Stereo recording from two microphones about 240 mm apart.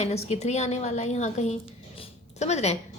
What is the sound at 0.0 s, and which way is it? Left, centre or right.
A woman's voice, left.